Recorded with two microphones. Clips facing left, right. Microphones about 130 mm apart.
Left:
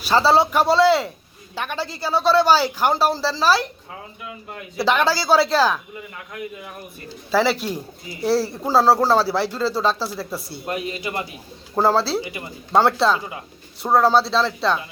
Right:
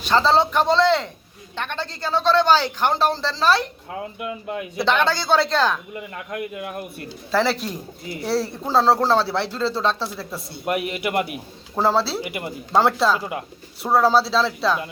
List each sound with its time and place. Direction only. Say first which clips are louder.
0.0 s speech: left 1 dB; 10° left (ahead or behind)
4.8 s speech: left 2 dB; 5° left (ahead or behind)
6.3 s speech: right 5 dB; 70° right (ahead or behind)
7.3 s speech: left 2 dB; centre (ahead or behind)
10.8 s a man's voice: right 4 dB; 65° right (ahead or behind)
11.7 s speech: left 2 dB; centre (ahead or behind)